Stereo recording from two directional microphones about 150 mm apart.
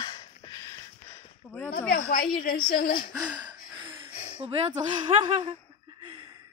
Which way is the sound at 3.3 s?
30° right (ahead or behind).